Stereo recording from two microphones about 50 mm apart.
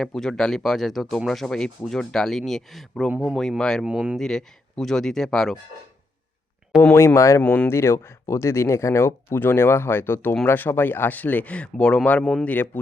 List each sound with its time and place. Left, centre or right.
0.0 s speech: centre
3.8 s speech: right
4.2 s speech: centre
6.9 s speech: left
7.4 s speech: left
7.7 s speech: left
12.2 s speech: centre
12.5 s speech: left